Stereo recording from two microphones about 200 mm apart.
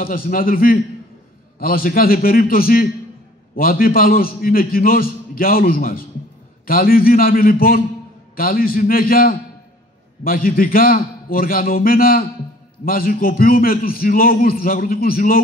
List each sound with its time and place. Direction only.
0.0 s a man's voice: 45° left (ahead or behind)